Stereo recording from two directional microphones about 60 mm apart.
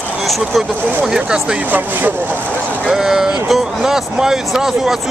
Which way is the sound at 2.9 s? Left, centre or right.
Centre.